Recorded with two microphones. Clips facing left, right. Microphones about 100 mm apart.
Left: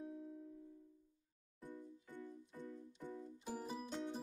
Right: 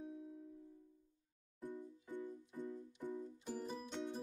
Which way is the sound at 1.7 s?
20° right (ahead or behind).